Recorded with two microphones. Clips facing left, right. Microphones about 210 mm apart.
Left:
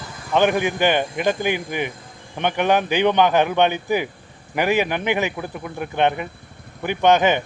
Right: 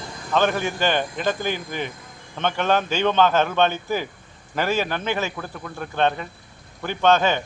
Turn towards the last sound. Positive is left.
turn(degrees=15)  # may be behind; listen again after turning